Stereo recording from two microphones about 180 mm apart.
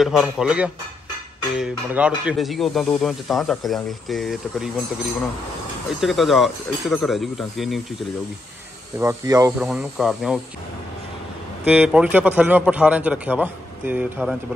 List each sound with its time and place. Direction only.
0.0 s speech: centre (ahead or behind)
5.9 s speech: centre (ahead or behind)
9.0 s speech: 20° right (ahead or behind)
9.6 s speech: 5° right (ahead or behind)
11.6 s a man's voice: 5° right (ahead or behind)